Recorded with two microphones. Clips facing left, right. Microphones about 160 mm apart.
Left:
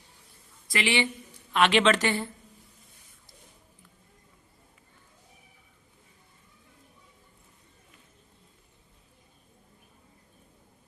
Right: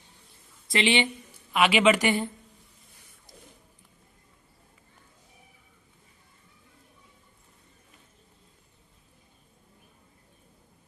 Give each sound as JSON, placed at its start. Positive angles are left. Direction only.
{"t": 0.7, "sound": "speech", "side_deg": -20}
{"t": 1.5, "sound": "a woman's voice", "side_deg": -10}